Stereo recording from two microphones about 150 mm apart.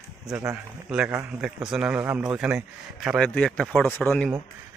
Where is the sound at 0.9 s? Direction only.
10° right (ahead or behind).